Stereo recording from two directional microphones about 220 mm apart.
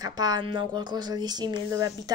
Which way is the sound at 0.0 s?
15° right (ahead or behind).